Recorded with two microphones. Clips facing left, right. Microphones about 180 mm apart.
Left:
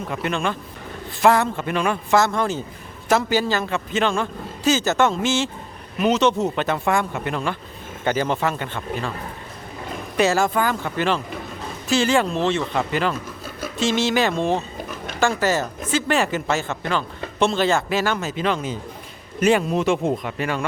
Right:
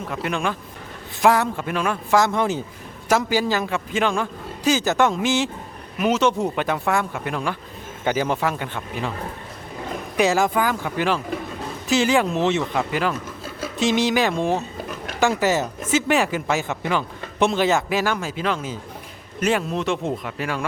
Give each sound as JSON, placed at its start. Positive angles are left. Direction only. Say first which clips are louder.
{"t": 0.1, "sound": "a man's voice", "louder": "left 1 dB", "side_deg": -5}
{"t": 10.2, "sound": "a man's voice", "louder": "even", "side_deg": -15}
{"t": 12.7, "sound": "a man's voice", "louder": "left 1 dB", "side_deg": -5}
{"t": 13.6, "sound": "a sound", "louder": "right 1 dB", "side_deg": -15}
{"t": 15.3, "sound": "a man's voice", "louder": "right 1 dB", "side_deg": -20}